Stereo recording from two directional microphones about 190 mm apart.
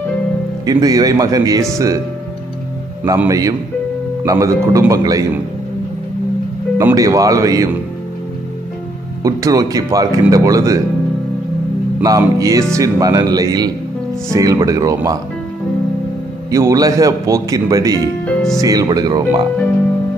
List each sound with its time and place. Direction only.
0.7 s speech: 20° right (ahead or behind)
3.3 s a man's voice: 15° right (ahead or behind)
6.8 s a man's voice: 15° right (ahead or behind)
9.2 s a man's voice: 20° right (ahead or behind)
12.0 s a man's voice: 20° right (ahead or behind)
16.4 s a man's voice: 15° right (ahead or behind)
18.2 s speech: centre (ahead or behind)
18.6 s speech: 20° right (ahead or behind)